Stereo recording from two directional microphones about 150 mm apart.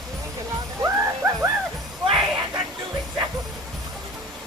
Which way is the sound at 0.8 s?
20° right (ahead or behind).